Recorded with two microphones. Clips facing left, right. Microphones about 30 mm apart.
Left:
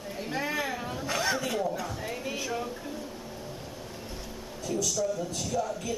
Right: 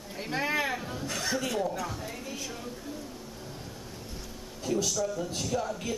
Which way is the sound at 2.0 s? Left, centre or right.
Left.